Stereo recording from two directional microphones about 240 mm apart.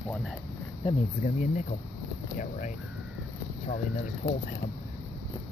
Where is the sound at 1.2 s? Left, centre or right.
Left.